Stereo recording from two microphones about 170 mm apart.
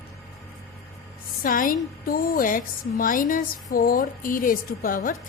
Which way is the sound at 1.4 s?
55° left (ahead or behind).